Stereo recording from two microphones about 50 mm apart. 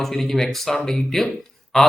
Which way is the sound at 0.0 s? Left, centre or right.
Centre.